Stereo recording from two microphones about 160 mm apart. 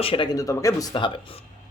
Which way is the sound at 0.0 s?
35° left (ahead or behind).